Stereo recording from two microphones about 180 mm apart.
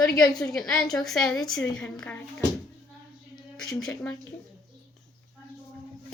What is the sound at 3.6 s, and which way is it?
Speech, 5° left (ahead or behind).